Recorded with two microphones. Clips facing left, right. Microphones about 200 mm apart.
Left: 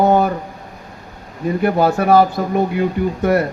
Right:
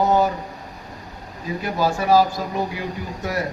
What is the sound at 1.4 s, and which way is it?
Speech, 60° left (ahead or behind).